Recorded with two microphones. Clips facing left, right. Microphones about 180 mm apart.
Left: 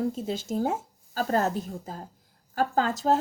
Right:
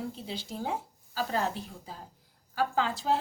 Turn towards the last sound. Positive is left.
turn(degrees=45)  # may be behind; listen again after turning